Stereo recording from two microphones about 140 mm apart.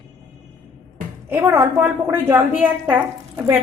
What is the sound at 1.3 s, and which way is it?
A woman's voice, 15° right (ahead or behind).